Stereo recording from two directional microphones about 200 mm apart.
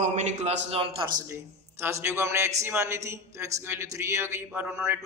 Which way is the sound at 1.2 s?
10° right (ahead or behind).